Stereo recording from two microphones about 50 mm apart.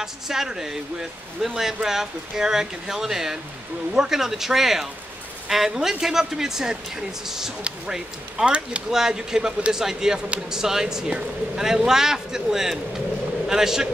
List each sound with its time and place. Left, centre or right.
0.0 s speech: centre
8.9 s speech: centre